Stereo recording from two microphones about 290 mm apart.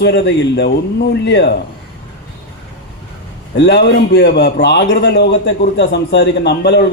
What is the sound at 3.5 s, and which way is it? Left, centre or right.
A man's voice, left.